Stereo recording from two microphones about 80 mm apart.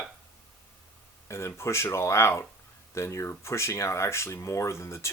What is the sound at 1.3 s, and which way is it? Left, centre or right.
Speech, left.